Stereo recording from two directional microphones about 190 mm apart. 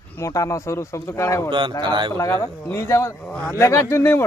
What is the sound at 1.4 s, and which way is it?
Speech, 25° right (ahead or behind).